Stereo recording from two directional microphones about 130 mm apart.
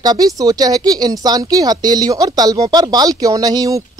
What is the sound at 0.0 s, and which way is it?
Speech, 30° right (ahead or behind).